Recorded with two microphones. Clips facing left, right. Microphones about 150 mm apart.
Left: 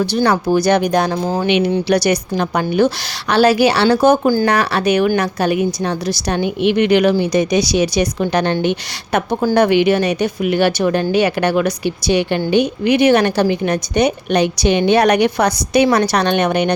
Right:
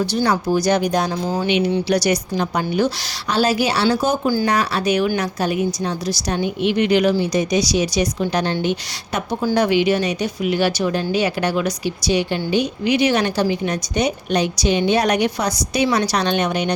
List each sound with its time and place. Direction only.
0.0 s speech: 65° left (ahead or behind)